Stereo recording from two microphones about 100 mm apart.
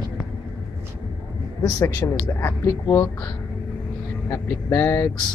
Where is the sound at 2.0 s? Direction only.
30° left (ahead or behind).